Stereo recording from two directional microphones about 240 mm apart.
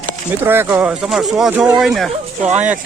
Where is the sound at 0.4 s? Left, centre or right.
Centre.